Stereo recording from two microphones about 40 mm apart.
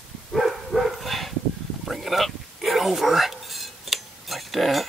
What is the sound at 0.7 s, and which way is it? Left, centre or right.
Dog, centre.